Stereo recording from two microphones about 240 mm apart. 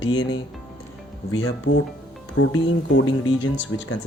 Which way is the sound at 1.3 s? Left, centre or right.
Left.